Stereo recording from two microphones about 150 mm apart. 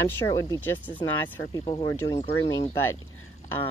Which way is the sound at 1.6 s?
35° left (ahead or behind).